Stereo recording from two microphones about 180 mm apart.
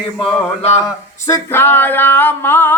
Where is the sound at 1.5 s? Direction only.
10° left (ahead or behind).